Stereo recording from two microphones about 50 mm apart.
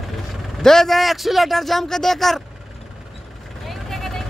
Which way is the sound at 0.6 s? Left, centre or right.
Centre.